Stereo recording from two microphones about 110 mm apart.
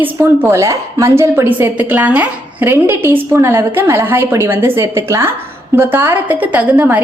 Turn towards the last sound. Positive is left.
turn(degrees=-15)  # may be behind; listen again after turning